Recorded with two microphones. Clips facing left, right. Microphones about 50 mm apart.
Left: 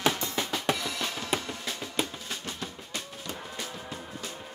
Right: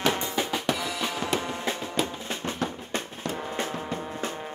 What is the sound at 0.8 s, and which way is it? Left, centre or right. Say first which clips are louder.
Music: right 3 dB; centre.